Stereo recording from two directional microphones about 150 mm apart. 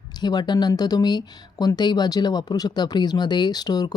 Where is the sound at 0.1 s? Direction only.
30° left (ahead or behind).